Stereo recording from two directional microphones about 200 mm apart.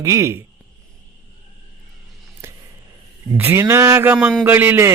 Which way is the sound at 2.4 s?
10° right (ahead or behind).